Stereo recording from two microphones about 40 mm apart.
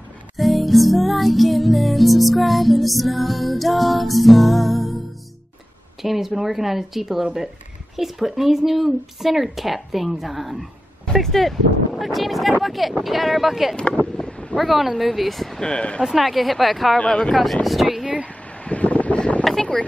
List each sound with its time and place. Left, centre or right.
0.4 s music: centre
6.0 s music: centre
14.1 s wind noise: left
14.6 s music: centre
15.6 s speech: left
16.0 s music: centre
17.0 s speech: left
18.0 s speech: right
18.6 s a sound: left
19.1 s boat: left